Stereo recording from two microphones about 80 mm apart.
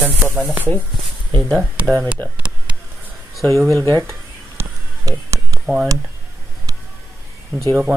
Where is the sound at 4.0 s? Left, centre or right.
Right.